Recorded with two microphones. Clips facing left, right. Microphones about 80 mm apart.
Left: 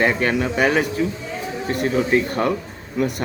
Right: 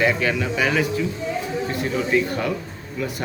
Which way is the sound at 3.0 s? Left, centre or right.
Left.